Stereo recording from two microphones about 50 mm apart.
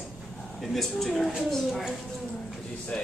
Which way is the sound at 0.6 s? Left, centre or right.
Centre.